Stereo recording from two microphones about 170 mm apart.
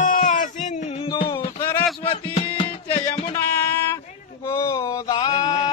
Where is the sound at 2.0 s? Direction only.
35° left (ahead or behind).